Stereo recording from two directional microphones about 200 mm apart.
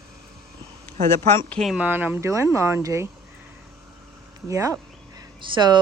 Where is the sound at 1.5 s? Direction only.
Centre (ahead or behind).